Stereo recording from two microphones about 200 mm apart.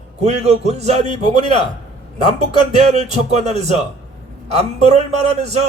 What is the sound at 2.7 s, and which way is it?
A man's voice, 30° right (ahead or behind).